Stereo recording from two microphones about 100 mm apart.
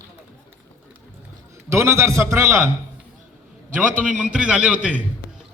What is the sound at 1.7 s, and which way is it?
Speech, 30° right (ahead or behind).